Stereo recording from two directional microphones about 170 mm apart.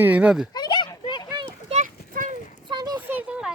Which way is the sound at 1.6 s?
45° right (ahead or behind).